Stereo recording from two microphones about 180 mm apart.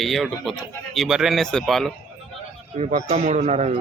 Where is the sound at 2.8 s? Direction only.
45° right (ahead or behind).